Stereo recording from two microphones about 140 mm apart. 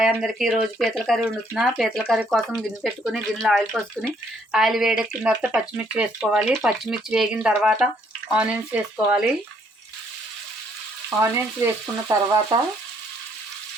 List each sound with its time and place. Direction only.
0.0 s speech: 5° right (ahead or behind)
11.2 s speech: 20° right (ahead or behind)